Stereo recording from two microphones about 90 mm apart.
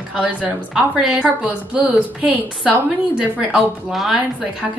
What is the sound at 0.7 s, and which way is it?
A woman's voice, 5° right (ahead or behind).